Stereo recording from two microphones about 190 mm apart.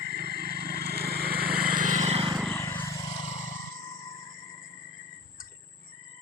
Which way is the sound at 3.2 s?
40° left (ahead or behind).